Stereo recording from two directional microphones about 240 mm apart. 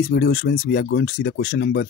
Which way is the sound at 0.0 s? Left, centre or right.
Left.